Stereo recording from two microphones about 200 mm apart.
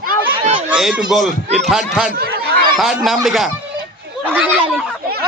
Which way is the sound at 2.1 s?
50° right (ahead or behind).